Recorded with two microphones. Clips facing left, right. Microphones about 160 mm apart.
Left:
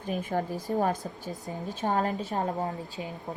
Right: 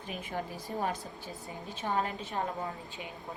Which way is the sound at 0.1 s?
45° left (ahead or behind).